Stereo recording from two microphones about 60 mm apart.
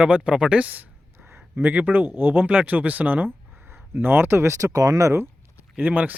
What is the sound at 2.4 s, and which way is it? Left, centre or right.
Speech, right.